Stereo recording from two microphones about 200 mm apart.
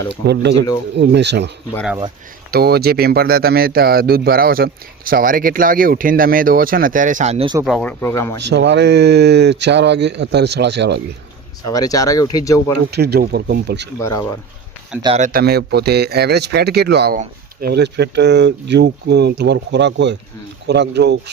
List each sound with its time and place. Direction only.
0.9 s speech: 60° right (ahead or behind)
2.5 s speech: 50° right (ahead or behind); by 7.6 s 25° right (ahead or behind)
7.6 s speech: centre (ahead or behind)
8.4 s speech: 60° right (ahead or behind)
11.7 s speech: 15° left (ahead or behind)
12.9 s speech: 55° right (ahead or behind)
14.0 s speech: 15° left (ahead or behind)
15.2 s speech: 50° right (ahead or behind)